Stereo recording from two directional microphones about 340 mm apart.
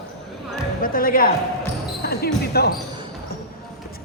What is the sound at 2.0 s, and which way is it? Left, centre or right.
Basketball bounce, left.